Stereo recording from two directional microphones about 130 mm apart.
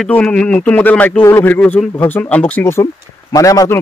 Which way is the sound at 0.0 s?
10° left (ahead or behind).